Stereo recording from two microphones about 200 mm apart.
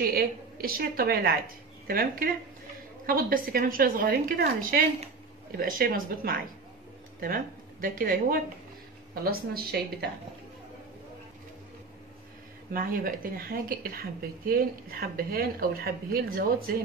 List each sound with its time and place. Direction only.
0.0 s speech: 50° right (ahead or behind)
12.7 s speech: 45° right (ahead or behind)